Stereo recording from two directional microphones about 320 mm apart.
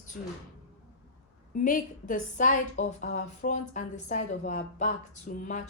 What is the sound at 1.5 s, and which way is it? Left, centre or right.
A woman's voice, left.